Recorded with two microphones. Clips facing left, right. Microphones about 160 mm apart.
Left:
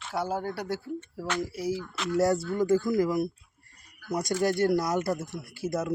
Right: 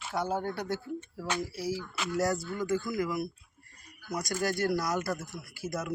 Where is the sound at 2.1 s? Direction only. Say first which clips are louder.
Left 6 dB; 30° left (ahead or behind).